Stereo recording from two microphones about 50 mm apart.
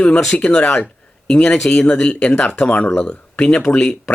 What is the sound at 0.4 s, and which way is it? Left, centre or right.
Speech, left.